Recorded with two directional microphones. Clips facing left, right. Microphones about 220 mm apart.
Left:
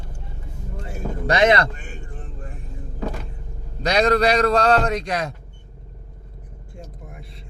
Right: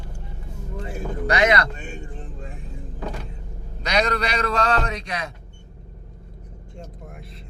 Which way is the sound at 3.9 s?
35° left (ahead or behind).